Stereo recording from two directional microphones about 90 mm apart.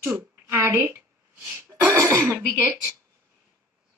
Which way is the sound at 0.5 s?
30° right (ahead or behind).